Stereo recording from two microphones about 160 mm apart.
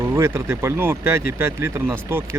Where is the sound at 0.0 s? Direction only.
15° right (ahead or behind).